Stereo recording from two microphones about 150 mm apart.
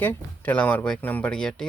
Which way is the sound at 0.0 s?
10° left (ahead or behind).